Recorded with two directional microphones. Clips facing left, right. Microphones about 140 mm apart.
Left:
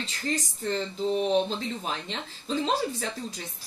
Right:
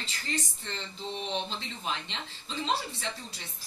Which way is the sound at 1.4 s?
45° left (ahead or behind).